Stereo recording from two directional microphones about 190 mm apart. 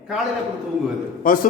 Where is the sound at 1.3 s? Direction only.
45° left (ahead or behind).